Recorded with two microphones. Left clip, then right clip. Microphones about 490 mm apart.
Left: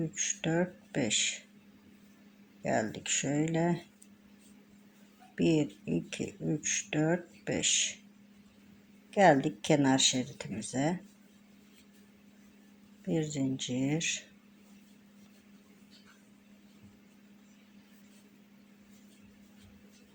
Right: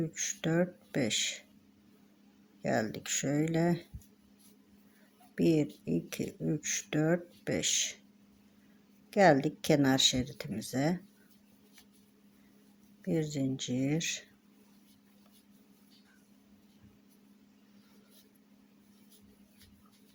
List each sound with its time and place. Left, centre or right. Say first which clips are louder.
0.1 s speech: left 1 dB; right
2.6 s speech: left 1 dB; right
5.3 s speech: even; right
9.0 s speech: left 1 dB; right
13.1 s speech: even; right